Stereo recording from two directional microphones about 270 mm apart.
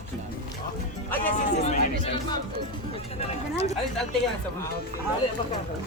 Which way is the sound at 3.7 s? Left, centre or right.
Centre.